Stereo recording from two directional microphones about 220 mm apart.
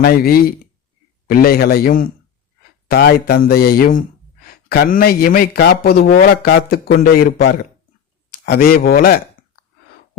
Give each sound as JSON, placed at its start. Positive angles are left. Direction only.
{"t": 0.0, "sound": "speech", "side_deg": 45}